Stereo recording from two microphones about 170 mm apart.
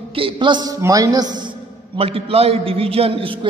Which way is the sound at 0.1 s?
30° right (ahead or behind).